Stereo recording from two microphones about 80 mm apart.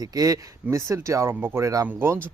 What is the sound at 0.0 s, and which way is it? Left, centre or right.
Speech, right.